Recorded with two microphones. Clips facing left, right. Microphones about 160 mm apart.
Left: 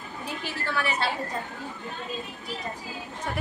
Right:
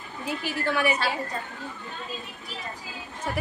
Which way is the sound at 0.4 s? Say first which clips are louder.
Right 5 dB; 15° right (ahead or behind).